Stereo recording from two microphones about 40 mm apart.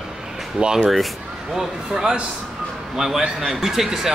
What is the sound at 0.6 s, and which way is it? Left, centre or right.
Speech, right.